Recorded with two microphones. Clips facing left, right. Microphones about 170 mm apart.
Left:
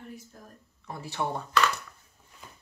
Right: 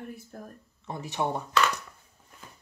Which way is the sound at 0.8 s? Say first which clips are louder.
Right 2 dB; 20° right (ahead or behind).